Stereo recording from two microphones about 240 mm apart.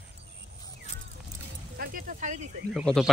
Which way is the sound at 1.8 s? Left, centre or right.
Right.